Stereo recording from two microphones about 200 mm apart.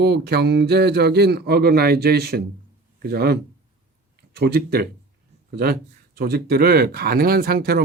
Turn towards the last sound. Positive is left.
turn(degrees=-50)  # may be behind; listen again after turning